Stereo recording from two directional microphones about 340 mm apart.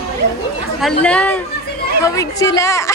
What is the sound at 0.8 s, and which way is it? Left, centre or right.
Speech, centre.